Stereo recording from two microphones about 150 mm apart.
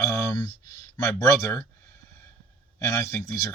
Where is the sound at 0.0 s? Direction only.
20° left (ahead or behind).